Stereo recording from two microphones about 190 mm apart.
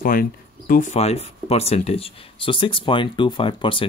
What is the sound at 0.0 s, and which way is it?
Speech, 50° left (ahead or behind).